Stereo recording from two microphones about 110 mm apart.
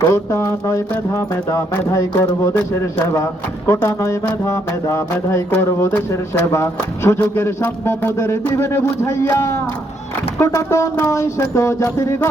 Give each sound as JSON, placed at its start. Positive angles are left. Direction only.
{"t": 0.1, "sound": "music", "side_deg": 25}